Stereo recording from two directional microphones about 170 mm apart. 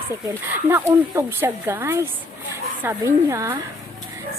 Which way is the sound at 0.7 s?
15° right (ahead or behind).